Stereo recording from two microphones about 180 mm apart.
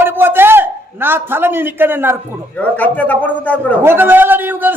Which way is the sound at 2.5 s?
10° left (ahead or behind).